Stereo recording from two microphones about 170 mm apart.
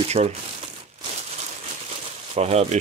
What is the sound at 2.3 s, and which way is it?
Speech, 40° right (ahead or behind).